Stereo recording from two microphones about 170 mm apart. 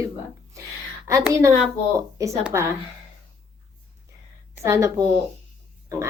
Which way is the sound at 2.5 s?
15° right (ahead or behind).